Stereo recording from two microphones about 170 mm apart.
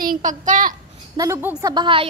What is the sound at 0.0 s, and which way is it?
Speech, 50° right (ahead or behind).